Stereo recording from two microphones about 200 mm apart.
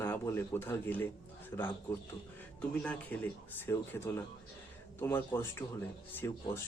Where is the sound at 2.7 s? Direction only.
5° left (ahead or behind).